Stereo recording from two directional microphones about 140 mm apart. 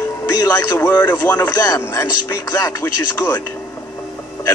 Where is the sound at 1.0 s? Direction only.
10° left (ahead or behind).